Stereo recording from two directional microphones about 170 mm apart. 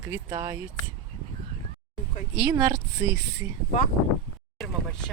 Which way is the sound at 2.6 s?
20° right (ahead or behind).